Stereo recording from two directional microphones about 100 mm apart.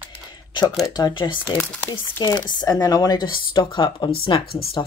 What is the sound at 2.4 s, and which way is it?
Speech, 45° left (ahead or behind).